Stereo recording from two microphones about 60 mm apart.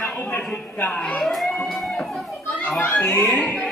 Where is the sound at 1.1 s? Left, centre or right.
Centre.